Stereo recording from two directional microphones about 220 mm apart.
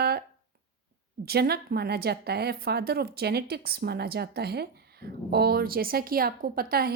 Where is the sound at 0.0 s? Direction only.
45° right (ahead or behind).